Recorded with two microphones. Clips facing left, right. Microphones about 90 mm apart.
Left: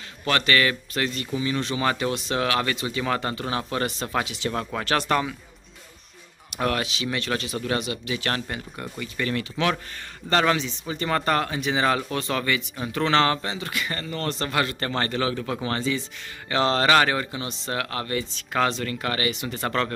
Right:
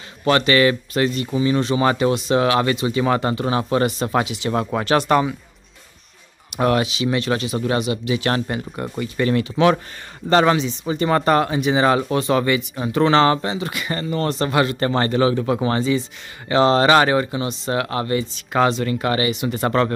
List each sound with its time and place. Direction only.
0.2 s speech: 20° right (ahead or behind)
6.5 s speech: 15° right (ahead or behind)
8.4 s speech: 30° right (ahead or behind); by 19.9 s 15° right (ahead or behind)